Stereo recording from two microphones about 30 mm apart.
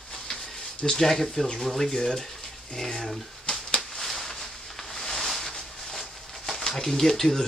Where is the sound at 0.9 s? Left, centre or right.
Centre.